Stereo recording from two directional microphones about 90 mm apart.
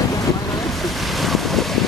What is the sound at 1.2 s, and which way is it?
Boat, centre (ahead or behind).